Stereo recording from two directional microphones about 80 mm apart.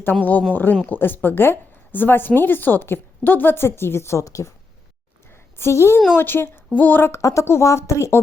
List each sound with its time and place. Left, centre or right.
0.0 s a woman's voice: left
5.5 s a woman's voice: left
7.1 s speech: left